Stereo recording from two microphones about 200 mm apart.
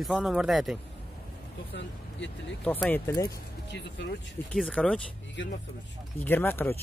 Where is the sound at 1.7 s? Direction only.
65° left (ahead or behind).